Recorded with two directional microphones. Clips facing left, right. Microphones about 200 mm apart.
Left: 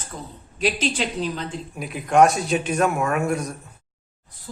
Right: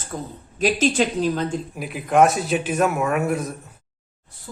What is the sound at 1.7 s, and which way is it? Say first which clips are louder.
A man's voice: left 1 dB; centre (ahead or behind).